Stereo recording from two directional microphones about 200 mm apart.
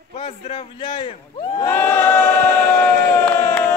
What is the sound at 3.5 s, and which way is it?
Crowd, 10° left (ahead or behind).